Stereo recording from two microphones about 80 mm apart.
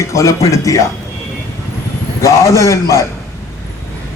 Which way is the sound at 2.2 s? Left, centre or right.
Left.